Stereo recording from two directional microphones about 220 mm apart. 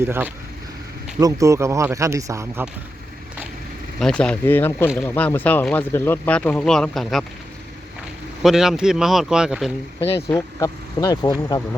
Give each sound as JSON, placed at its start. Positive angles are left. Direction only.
{"t": 0.0, "sound": "speech", "side_deg": -10}
{"t": 4.0, "sound": "speech", "side_deg": 5}
{"t": 8.4, "sound": "speech", "side_deg": 0}
{"t": 10.2, "sound": "speech", "side_deg": 15}